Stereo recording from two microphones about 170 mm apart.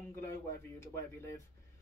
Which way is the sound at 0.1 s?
15° left (ahead or behind).